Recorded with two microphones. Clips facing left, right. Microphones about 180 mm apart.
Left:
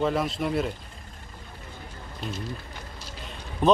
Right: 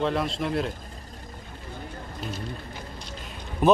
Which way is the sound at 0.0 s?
Centre (ahead or behind).